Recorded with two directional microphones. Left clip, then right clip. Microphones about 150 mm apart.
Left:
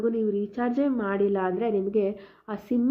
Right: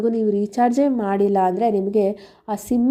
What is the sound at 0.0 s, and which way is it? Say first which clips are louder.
A woman's voice: right 6 dB; 35° right (ahead or behind).